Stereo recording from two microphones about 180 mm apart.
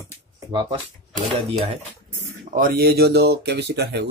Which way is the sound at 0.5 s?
25° right (ahead or behind).